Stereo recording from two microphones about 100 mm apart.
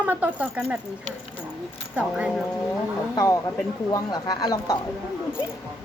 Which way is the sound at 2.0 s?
15° right (ahead or behind).